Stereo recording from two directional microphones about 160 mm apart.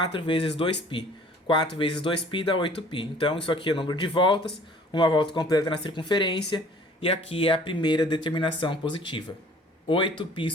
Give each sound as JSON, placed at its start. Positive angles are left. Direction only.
{"t": 0.1, "sound": "speech", "side_deg": 30}